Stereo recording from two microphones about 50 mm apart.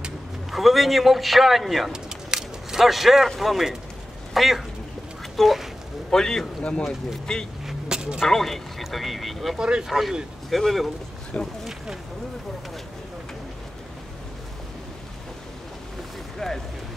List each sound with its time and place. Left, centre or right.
0.5 s a man's voice: centre
1.9 s a sound: centre
3.3 s a man's voice: centre
6.0 s a man's voice: centre
7.6 s a sound: centre
8.2 s a man's voice: centre
9.6 s speech: centre
9.8 s a man's voice: centre
11.3 s speech: left
16.3 s speech: centre